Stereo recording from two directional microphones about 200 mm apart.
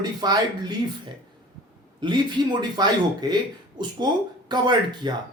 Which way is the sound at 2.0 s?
25° right (ahead or behind).